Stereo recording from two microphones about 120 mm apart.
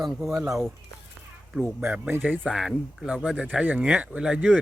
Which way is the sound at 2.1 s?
15° right (ahead or behind).